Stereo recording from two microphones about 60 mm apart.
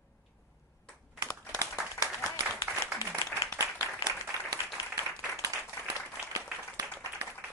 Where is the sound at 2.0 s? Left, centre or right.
Left.